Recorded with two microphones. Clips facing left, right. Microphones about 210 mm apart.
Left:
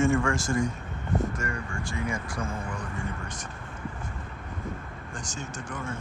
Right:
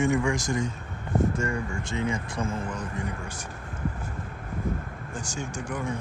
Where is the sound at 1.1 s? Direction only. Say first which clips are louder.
Right 3 dB; 25° right (ahead or behind).